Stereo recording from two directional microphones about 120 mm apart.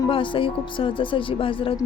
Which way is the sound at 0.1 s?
45° left (ahead or behind).